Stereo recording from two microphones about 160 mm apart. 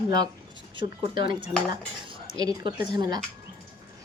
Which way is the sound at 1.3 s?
30° right (ahead or behind).